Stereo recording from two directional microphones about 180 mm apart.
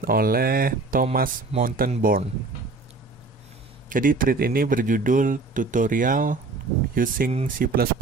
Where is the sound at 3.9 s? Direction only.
50° right (ahead or behind).